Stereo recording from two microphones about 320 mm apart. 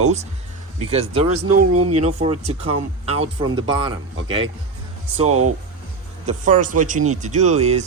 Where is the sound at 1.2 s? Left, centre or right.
Right.